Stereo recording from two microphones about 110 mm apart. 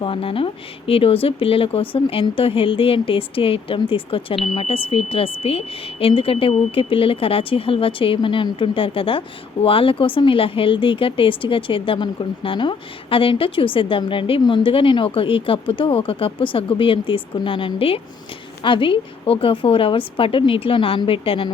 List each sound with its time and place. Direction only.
0.0 s a woman's voice: 55° left (ahead or behind)